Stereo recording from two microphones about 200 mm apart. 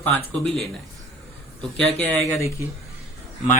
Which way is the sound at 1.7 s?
5° left (ahead or behind).